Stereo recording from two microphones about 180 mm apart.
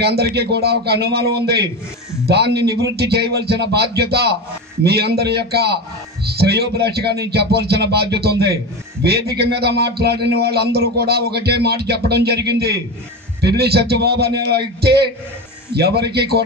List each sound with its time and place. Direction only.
0.0 s a man's voice: 65° right (ahead or behind)